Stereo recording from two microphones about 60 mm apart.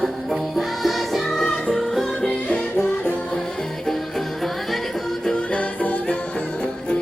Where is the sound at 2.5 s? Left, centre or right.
Left.